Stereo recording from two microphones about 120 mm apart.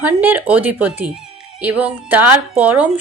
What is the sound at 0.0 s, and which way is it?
A woman's voice, 15° right (ahead or behind).